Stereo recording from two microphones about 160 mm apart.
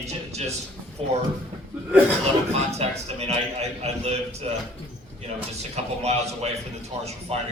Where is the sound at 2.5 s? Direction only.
40° right (ahead or behind).